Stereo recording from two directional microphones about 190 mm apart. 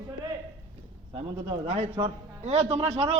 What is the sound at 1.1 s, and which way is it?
A man's voice, 35° right (ahead or behind).